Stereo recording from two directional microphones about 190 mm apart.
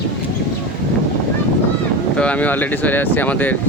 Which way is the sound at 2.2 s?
5° left (ahead or behind).